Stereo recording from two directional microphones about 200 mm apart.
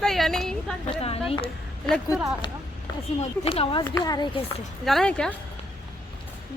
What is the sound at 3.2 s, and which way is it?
Speech, 30° left (ahead or behind).